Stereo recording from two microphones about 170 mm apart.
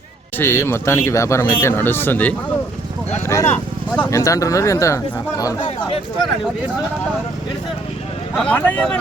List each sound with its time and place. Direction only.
0.3 s speech: 15° left (ahead or behind)
8.4 s speech: 10° left (ahead or behind)